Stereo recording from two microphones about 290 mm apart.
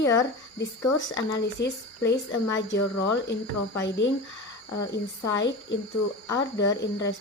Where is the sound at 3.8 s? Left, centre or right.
Left.